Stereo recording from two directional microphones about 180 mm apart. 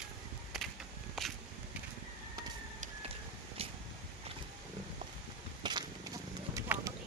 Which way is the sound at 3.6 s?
35° right (ahead or behind).